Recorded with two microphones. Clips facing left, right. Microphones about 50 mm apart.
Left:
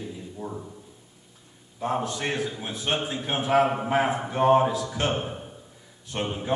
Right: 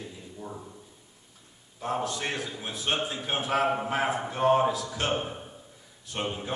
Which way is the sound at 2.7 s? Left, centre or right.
Left.